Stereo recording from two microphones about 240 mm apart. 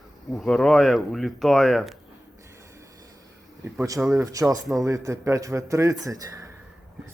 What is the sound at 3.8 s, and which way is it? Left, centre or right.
Speech, centre.